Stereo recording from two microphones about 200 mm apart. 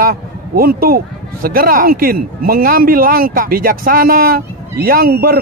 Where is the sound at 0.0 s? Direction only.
50° right (ahead or behind).